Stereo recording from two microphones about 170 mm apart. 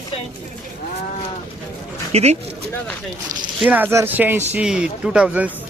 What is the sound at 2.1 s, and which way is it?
Speech, 40° right (ahead or behind).